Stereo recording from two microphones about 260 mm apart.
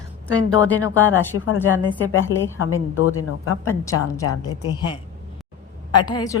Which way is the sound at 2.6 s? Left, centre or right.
Left.